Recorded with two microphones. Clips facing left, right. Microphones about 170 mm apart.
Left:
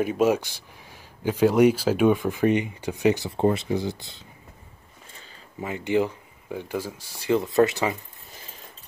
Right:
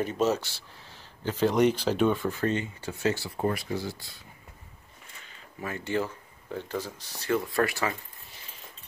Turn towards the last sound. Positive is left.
turn(degrees=20)  # may be behind; listen again after turning